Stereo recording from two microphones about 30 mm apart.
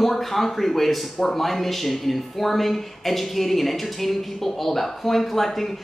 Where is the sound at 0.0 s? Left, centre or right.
Centre.